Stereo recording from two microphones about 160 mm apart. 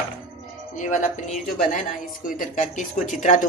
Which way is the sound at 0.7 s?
50° left (ahead or behind).